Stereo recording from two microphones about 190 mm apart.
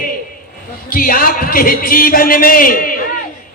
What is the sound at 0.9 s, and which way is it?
Speech, 50° left (ahead or behind).